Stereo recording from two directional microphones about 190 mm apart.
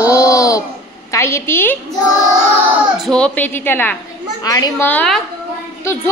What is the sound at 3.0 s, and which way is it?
A woman's voice, 5° left (ahead or behind).